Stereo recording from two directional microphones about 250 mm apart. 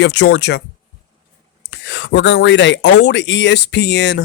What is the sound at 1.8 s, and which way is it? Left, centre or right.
Speech, left.